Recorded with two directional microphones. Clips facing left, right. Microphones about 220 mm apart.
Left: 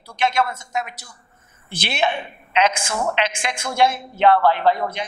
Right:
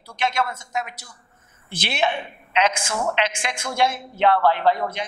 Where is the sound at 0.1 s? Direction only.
10° left (ahead or behind).